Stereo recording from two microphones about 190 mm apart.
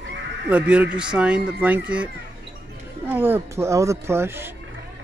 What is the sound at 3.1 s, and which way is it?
A man's voice, 10° right (ahead or behind).